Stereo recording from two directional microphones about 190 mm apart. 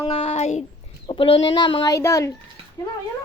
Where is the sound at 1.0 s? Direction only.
25° left (ahead or behind).